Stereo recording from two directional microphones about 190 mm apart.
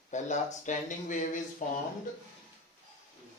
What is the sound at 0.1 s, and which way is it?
Speech, 40° left (ahead or behind).